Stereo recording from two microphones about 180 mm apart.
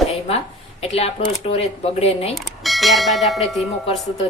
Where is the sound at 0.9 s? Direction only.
35° left (ahead or behind).